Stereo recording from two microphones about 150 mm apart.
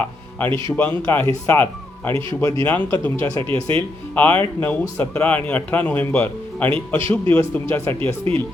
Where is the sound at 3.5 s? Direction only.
35° right (ahead or behind).